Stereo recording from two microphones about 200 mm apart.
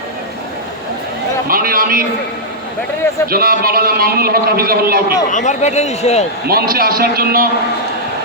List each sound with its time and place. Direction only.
1.5 s a man's voice: 45° right (ahead or behind)
3.2 s a man's voice: 50° right (ahead or behind)
5.3 s speech: 35° left (ahead or behind)
6.5 s a man's voice: 50° right (ahead or behind)